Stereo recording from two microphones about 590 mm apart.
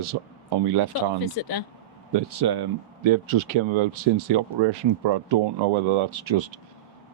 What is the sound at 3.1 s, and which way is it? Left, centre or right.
Speech, right.